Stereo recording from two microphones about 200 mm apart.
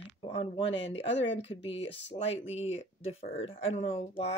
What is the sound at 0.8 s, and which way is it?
Speech, 65° left (ahead or behind).